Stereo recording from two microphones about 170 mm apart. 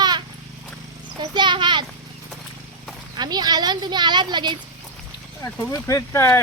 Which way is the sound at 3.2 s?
25° right (ahead or behind).